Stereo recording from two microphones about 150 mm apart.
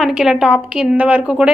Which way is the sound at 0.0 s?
5° right (ahead or behind).